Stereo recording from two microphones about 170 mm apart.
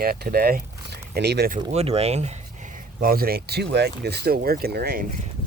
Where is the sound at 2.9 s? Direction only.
60° right (ahead or behind).